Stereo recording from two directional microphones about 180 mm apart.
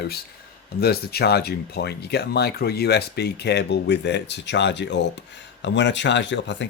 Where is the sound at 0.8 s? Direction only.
60° left (ahead or behind).